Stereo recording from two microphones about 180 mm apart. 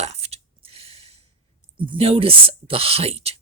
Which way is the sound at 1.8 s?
30° right (ahead or behind).